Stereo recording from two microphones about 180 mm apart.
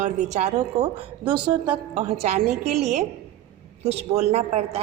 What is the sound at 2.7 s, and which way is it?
A woman's voice, 40° right (ahead or behind).